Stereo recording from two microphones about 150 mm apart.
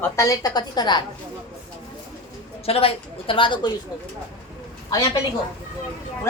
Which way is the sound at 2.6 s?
40° left (ahead or behind).